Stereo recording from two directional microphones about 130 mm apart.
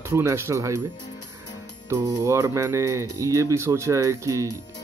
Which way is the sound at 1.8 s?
20° right (ahead or behind).